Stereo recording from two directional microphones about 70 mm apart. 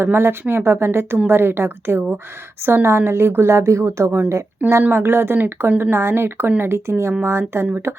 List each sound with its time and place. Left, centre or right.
0.0 s speech: right
4.8 s speech: right